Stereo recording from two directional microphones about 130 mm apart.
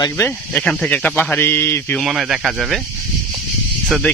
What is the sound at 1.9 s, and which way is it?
Speech, 5° right (ahead or behind).